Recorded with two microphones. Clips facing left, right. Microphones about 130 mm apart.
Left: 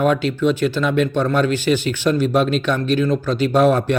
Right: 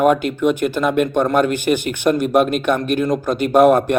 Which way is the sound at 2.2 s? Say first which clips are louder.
Right 2 dB; 50° right (ahead or behind).